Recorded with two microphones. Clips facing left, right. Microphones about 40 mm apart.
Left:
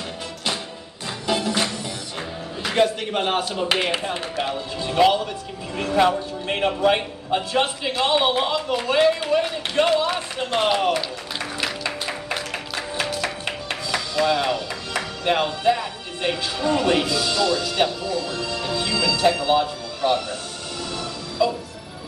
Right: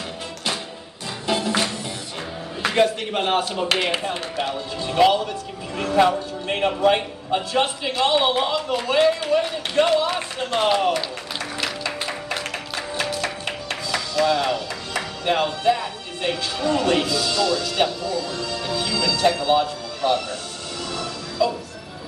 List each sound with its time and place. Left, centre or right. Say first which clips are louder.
1.2 s music: even; centre
2.7 s a man's voice: even; centre
3.6 s a man's voice: even; centre
11.6 s music: even; centre
16.9 s speech: even; centre
18.2 s music: left 1 dB; left
19.4 s speech: right 1 dB; centre